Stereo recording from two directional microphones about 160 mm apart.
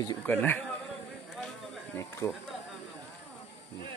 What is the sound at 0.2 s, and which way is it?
Speech, 10° left (ahead or behind).